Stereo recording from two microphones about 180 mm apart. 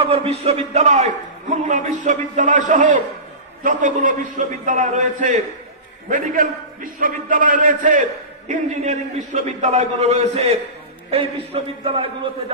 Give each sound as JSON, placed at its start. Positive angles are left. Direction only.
{"t": 0.0, "sound": "a man's voice", "side_deg": -35}